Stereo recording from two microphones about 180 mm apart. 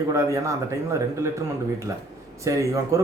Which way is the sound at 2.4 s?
15° right (ahead or behind).